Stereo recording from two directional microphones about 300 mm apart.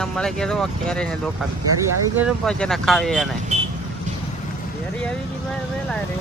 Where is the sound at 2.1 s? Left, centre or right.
Centre.